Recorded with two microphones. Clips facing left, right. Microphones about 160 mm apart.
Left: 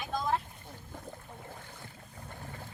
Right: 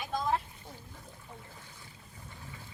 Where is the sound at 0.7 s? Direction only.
55° left (ahead or behind).